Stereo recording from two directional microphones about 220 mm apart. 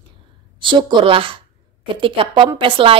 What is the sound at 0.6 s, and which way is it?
A woman's voice, 20° right (ahead or behind).